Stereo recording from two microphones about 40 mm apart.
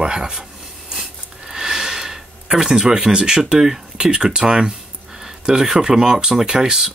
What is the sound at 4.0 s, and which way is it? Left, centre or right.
Speech, right.